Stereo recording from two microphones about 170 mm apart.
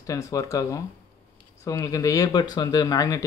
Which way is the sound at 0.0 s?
20° left (ahead or behind).